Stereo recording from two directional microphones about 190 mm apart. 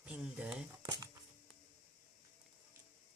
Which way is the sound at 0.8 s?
20° right (ahead or behind).